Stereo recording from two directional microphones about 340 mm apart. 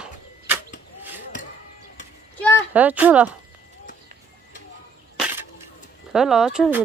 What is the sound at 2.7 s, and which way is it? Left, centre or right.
Speech, centre.